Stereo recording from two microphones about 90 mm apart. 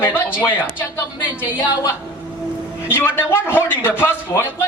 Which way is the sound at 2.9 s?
25° left (ahead or behind).